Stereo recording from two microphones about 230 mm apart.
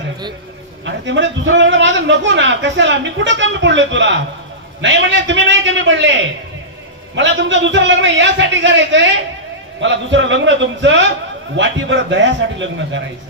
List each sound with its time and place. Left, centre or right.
1.0 s a man's voice: right